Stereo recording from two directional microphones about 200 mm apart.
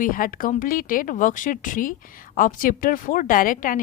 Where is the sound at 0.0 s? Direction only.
45° left (ahead or behind).